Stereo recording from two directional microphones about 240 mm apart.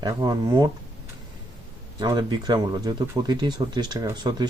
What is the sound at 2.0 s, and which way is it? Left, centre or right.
Speech, centre.